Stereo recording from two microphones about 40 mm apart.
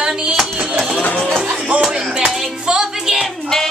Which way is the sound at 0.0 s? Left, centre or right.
Centre.